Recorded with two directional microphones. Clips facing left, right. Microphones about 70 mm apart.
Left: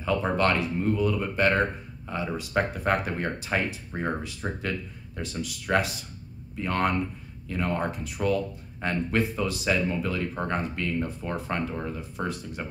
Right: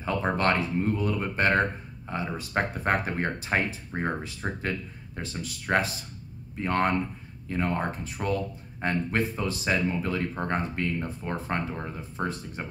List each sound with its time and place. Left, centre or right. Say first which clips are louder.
0.0 s speech: left 1 dB; right